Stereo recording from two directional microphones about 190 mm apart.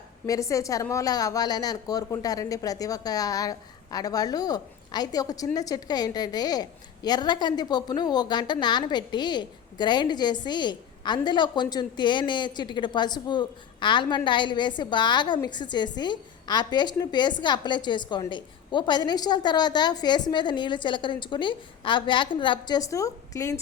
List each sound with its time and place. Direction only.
0.3 s a woman's voice: 15° left (ahead or behind)